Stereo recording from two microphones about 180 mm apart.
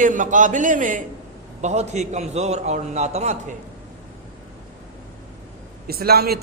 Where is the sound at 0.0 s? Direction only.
45° right (ahead or behind).